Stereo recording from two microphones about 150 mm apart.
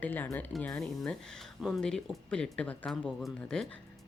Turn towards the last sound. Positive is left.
turn(degrees=5)  # may be behind; listen again after turning